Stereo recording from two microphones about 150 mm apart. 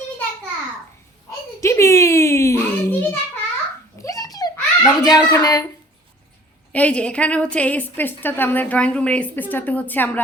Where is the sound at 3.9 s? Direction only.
25° left (ahead or behind).